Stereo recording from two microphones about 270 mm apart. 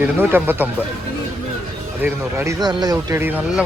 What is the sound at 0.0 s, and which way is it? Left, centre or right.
Speech, centre.